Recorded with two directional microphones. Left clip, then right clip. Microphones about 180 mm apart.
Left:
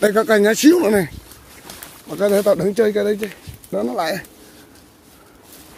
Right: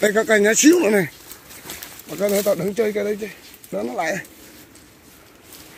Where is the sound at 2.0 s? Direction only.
15° left (ahead or behind).